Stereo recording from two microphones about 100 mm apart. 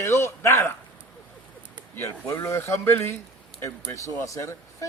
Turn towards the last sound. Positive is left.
turn(degrees=30)  # may be behind; listen again after turning